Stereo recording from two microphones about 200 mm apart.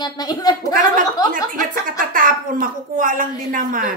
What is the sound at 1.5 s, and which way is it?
Speech, 45° right (ahead or behind).